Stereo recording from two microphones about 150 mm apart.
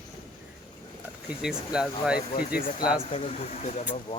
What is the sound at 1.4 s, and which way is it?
Speech, 5° right (ahead or behind).